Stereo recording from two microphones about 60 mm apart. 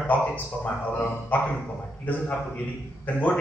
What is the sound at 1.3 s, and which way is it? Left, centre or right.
Speech, left.